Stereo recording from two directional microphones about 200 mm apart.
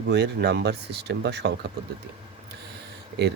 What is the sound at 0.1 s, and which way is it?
Speech, 55° right (ahead or behind).